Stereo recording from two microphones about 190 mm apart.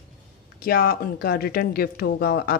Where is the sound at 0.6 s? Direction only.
50° left (ahead or behind).